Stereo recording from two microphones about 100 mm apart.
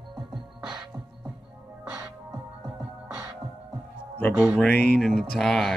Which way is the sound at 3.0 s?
35° right (ahead or behind).